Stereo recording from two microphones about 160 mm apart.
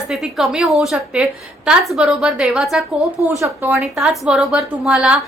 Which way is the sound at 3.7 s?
Centre (ahead or behind).